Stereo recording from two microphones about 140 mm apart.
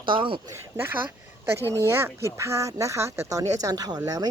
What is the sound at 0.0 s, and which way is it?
Speech, 35° right (ahead or behind).